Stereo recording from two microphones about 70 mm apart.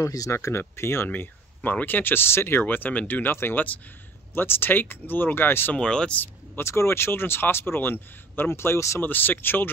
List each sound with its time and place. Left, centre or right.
0.0 s speech: left
0.3 s speech: left
2.6 s speech: left
5.8 s speech: centre
6.2 s speech: left
9.0 s speech: left